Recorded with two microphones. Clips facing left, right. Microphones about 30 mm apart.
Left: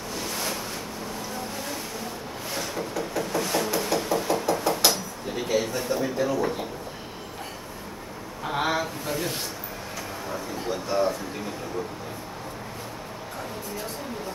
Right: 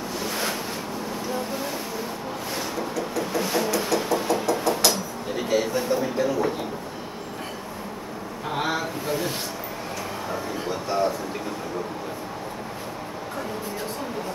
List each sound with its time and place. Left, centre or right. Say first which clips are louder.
0.3 s ocean: right 3 dB; centre
1.5 s vehicle: right 4 dB; centre
3.2 s a sound: right 1 dB; centre
8.5 s speech: left 1 dB; centre
10.7 s speech: even; centre